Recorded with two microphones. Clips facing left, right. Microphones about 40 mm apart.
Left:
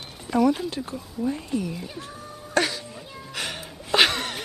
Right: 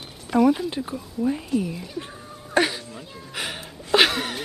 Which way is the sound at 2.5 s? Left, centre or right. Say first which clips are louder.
Right 2 dB; centre.